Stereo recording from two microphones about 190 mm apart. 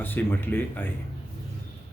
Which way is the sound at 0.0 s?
10° left (ahead or behind).